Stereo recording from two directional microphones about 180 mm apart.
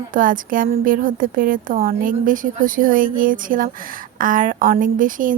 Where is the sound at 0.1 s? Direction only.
50° right (ahead or behind).